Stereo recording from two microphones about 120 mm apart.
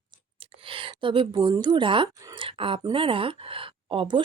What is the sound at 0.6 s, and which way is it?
A woman's voice, 45° right (ahead or behind).